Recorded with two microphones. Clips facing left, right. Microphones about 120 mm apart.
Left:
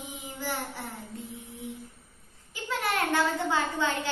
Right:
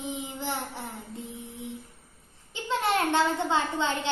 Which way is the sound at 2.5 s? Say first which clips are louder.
Right 4 dB; 25° right (ahead or behind).